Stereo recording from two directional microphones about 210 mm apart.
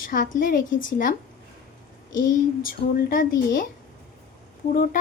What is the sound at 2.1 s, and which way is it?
A woman's voice, 40° left (ahead or behind).